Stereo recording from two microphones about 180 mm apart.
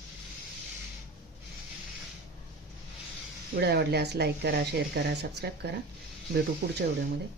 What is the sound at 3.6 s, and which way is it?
Speech, 65° right (ahead or behind).